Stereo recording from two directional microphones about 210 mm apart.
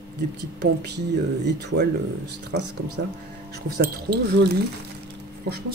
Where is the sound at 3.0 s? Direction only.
60° right (ahead or behind).